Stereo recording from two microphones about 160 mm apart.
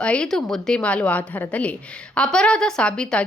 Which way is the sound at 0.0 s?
5° left (ahead or behind).